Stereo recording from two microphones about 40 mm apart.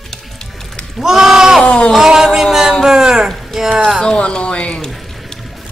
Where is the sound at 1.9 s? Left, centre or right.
Centre.